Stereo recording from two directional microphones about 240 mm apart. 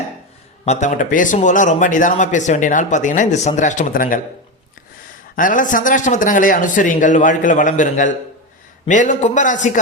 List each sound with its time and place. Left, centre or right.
0.6 s a man's voice: left
5.4 s a man's voice: left